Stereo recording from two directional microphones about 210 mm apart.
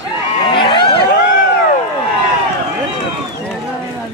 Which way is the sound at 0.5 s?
25° left (ahead or behind).